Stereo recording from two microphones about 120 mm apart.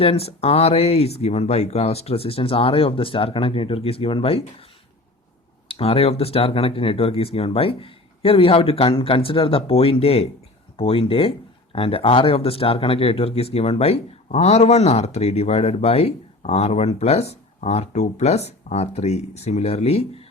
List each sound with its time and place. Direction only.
0.0 s speech: 55° left (ahead or behind)
5.6 s speech: 50° left (ahead or behind)